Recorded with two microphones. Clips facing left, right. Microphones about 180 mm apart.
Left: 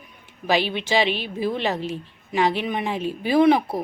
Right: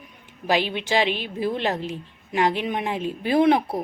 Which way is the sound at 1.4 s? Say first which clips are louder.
Even; 15° left (ahead or behind).